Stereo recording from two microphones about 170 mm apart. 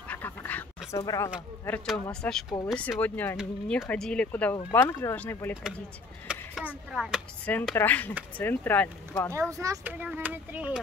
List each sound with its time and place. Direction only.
0.1 s duck: 10° left (ahead or behind)
1.0 s speech: 20° left (ahead or behind)
1.9 s speech: 5° left (ahead or behind)
6.2 s speech: 5° right (ahead or behind)
7.4 s speech: 10° left (ahead or behind)
9.5 s speech: 20° right (ahead or behind)